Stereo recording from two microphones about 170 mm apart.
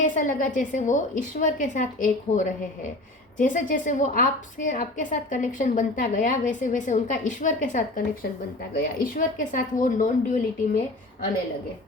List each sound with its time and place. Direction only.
0.0 s a woman's voice: 50° left (ahead or behind)